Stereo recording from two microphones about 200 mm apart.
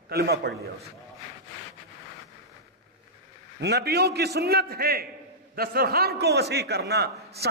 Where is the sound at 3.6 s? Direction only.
55° right (ahead or behind).